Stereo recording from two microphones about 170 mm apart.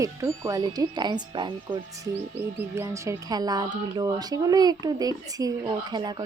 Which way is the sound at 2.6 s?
15° right (ahead or behind).